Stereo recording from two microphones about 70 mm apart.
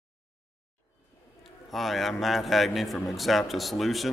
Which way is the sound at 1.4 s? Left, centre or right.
Centre.